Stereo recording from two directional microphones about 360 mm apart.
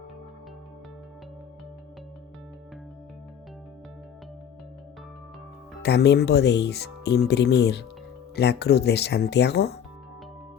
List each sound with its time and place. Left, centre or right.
5.8 s speech: left